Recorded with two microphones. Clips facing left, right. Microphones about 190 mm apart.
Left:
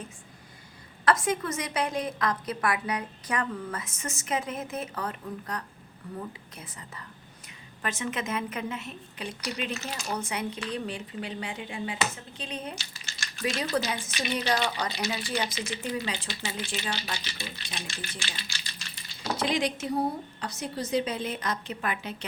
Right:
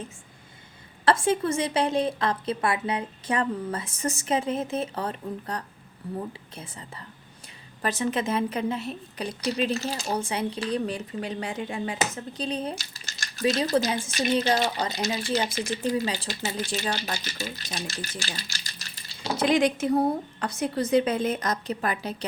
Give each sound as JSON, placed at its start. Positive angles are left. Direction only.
{"t": 1.0, "sound": "a woman's voice", "side_deg": -30}
{"t": 14.3, "sound": "a woman's voice", "side_deg": -25}
{"t": 14.6, "sound": "a woman's voice", "side_deg": -40}